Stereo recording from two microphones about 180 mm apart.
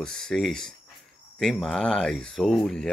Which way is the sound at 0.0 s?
5° left (ahead or behind).